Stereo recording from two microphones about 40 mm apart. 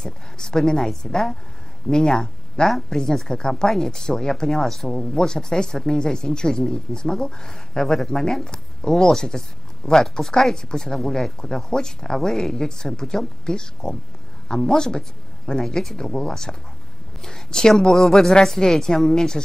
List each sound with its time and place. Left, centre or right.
0.0 s speech: centre